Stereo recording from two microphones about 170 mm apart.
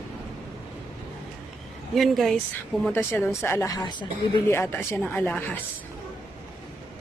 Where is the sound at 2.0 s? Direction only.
Centre (ahead or behind).